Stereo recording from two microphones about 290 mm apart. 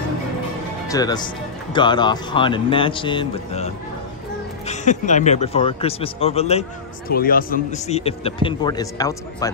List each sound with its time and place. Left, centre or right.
0.8 s speech: centre